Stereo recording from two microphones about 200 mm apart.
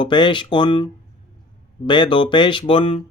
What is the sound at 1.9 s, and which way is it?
Speech, 25° left (ahead or behind).